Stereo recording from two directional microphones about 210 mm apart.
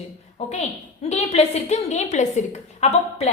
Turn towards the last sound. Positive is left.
turn(degrees=30)  # may be behind; listen again after turning